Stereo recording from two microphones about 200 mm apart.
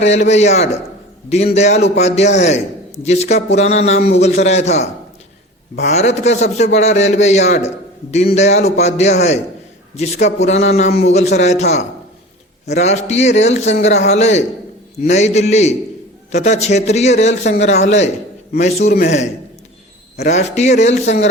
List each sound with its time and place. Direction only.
0.0 s a man's voice: 35° left (ahead or behind)